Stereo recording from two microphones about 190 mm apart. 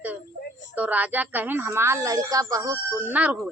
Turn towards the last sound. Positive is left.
turn(degrees=-10)  # may be behind; listen again after turning